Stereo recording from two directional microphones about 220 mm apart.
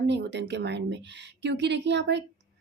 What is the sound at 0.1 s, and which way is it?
Speech, 50° right (ahead or behind).